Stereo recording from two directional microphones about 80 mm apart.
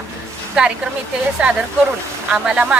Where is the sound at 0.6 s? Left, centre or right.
Centre.